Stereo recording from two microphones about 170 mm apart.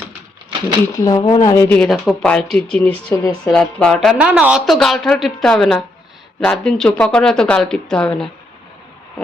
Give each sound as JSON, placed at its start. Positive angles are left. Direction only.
{"t": 0.9, "sound": "speech", "side_deg": 25}
{"t": 1.5, "sound": "speech", "side_deg": 15}